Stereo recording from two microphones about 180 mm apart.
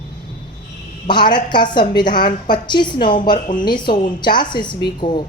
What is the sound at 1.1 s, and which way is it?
A woman's voice, 25° left (ahead or behind).